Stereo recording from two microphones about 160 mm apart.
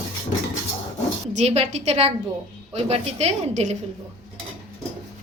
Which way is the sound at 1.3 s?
45° right (ahead or behind).